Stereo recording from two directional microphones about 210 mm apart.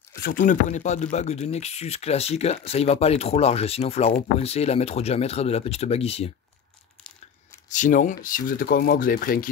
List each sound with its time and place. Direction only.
0.2 s speech: 40° left (ahead or behind)
7.7 s speech: 40° left (ahead or behind)